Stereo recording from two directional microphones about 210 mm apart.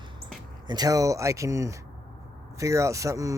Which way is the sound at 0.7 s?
15° right (ahead or behind).